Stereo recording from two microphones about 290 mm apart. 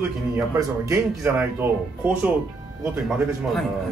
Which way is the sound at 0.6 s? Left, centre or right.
Centre.